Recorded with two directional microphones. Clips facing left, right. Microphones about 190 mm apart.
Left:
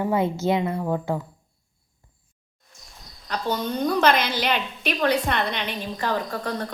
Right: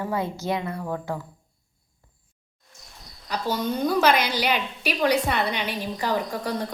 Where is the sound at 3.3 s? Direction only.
10° right (ahead or behind).